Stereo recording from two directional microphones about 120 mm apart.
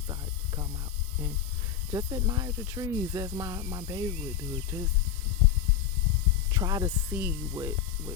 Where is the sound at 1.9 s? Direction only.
25° right (ahead or behind).